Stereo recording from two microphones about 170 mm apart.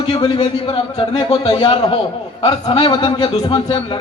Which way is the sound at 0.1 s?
25° left (ahead or behind).